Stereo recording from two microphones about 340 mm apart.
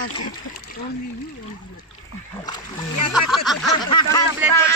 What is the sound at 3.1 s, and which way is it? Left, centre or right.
Speech, centre.